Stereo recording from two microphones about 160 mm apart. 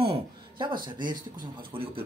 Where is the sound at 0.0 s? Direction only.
30° right (ahead or behind).